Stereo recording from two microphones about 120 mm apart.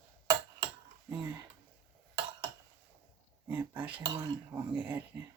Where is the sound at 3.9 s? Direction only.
45° right (ahead or behind).